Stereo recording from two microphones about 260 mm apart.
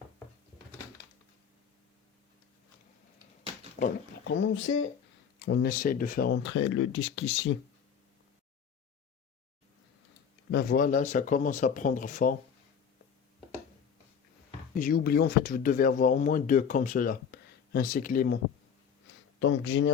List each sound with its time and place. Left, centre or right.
3.8 s speech: left
10.5 s speech: left
14.8 s speech: left
19.4 s speech: left